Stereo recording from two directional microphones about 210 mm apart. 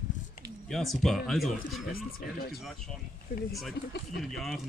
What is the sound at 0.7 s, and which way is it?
Speech, centre (ahead or behind).